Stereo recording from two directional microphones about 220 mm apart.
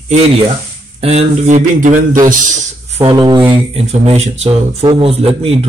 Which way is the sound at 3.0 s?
20° right (ahead or behind).